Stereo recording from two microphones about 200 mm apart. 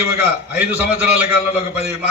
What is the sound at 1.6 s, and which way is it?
Speech, 30° left (ahead or behind).